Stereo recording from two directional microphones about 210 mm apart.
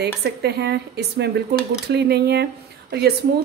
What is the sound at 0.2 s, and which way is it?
A woman's voice, 50° right (ahead or behind).